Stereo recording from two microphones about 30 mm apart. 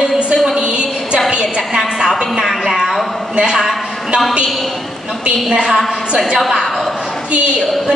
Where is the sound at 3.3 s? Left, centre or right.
Right.